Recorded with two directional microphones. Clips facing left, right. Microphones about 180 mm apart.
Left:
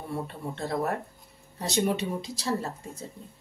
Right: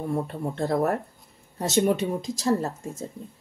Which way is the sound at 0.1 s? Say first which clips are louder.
Right 2 dB; 45° right (ahead or behind).